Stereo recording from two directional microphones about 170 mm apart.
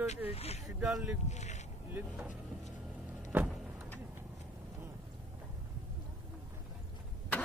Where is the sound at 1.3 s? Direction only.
45° left (ahead or behind).